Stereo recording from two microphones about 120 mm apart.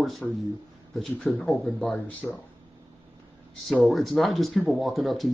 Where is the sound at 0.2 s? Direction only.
5° left (ahead or behind).